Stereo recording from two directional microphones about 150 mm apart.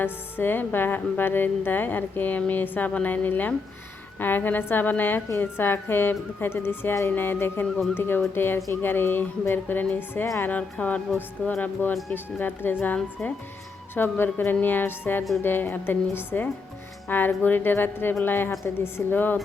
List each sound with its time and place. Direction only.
0.0 s a woman's voice: 15° left (ahead or behind)